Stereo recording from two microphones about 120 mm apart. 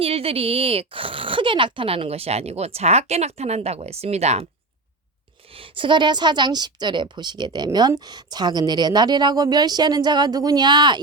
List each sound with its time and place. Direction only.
0.0 s speech: 55° right (ahead or behind)
5.5 s a woman's voice: 45° right (ahead or behind)